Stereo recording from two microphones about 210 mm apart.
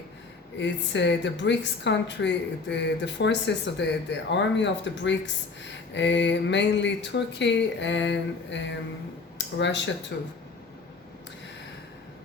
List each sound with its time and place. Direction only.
0.6 s a woman's voice: 55° left (ahead or behind)